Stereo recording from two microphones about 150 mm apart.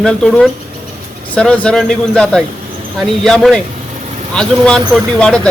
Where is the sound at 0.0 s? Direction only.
5° left (ahead or behind).